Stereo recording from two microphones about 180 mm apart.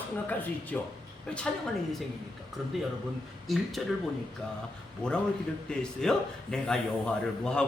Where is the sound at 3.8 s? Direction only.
Centre (ahead or behind).